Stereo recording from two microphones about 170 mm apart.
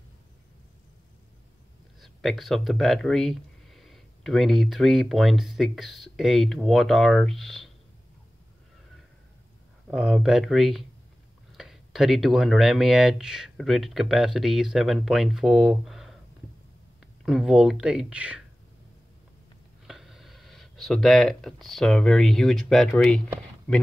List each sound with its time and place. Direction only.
2.0 s speech: centre (ahead or behind)
9.8 s speech: 5° right (ahead or behind)
17.2 s speech: centre (ahead or behind)
19.9 s speech: centre (ahead or behind)